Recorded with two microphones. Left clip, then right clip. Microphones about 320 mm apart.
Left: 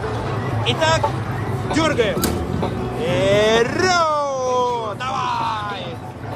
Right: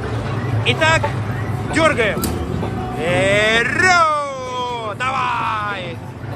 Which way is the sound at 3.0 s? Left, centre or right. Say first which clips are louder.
Right 1 dB; centre.